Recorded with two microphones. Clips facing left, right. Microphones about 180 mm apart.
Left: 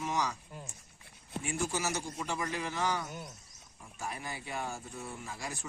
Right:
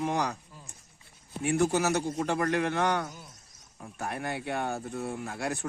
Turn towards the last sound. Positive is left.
turn(degrees=-65)  # may be behind; listen again after turning